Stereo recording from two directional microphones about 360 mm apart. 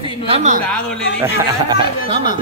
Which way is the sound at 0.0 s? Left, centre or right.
Centre.